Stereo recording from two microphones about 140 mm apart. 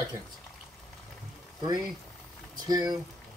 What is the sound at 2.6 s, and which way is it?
Speech, 30° right (ahead or behind).